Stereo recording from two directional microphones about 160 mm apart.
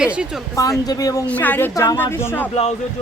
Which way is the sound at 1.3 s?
10° left (ahead or behind).